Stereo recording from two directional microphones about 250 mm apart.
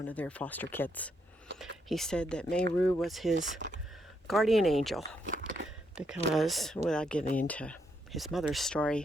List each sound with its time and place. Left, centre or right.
0.1 s speech: centre
3.6 s speech: right
4.3 s speech: centre
5.3 s biting: right
5.9 s speech: centre